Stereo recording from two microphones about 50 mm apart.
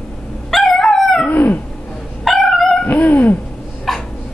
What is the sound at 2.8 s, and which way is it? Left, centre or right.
Cat, left.